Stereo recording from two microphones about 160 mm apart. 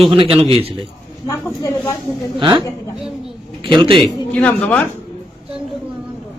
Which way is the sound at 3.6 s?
30° right (ahead or behind).